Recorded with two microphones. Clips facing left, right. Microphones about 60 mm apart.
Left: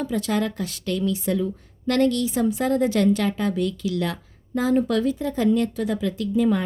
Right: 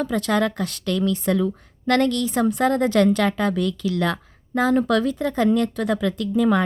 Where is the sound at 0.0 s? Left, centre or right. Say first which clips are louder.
Right 3 dB; right.